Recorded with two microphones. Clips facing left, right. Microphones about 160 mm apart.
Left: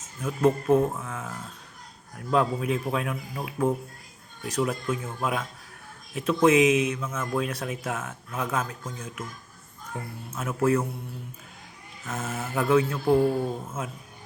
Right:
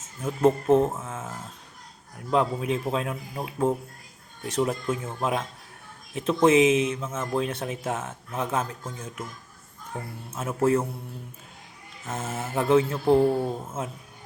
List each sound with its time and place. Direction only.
0.2 s speech: 25° right (ahead or behind)
10.3 s speech: 25° right (ahead or behind)
12.0 s speech: 25° right (ahead or behind)